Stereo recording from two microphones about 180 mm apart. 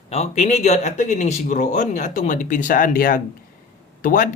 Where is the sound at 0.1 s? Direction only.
35° left (ahead or behind).